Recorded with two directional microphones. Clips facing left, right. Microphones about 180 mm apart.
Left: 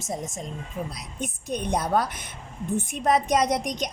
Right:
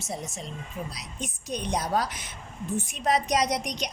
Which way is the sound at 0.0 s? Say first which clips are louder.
Left 3 dB; 45° left (ahead or behind).